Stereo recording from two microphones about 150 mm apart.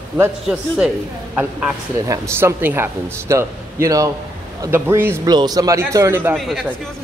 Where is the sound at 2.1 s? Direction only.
15° right (ahead or behind).